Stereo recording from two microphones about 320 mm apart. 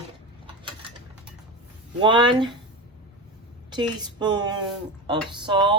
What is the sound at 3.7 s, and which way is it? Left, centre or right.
Speech, centre.